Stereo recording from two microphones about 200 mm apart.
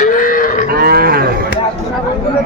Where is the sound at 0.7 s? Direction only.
50° right (ahead or behind).